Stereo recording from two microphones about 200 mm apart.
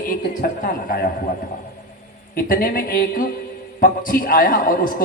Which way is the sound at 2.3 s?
45° left (ahead or behind).